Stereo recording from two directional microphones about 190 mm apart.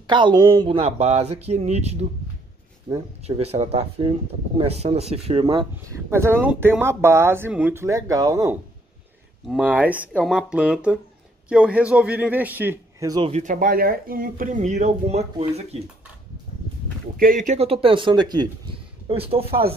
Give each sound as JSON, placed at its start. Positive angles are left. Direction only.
{"t": 0.0, "sound": "speech", "side_deg": -25}
{"t": 6.0, "sound": "speech", "side_deg": -15}
{"t": 9.5, "sound": "speech", "side_deg": -5}
{"t": 13.3, "sound": "speech", "side_deg": -40}
{"t": 17.2, "sound": "speech", "side_deg": -45}